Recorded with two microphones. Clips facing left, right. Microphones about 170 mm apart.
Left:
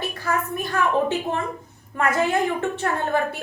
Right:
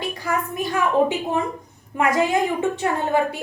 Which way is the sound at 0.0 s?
15° right (ahead or behind).